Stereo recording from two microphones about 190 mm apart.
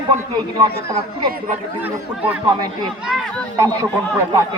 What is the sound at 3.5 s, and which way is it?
Speech, 15° right (ahead or behind).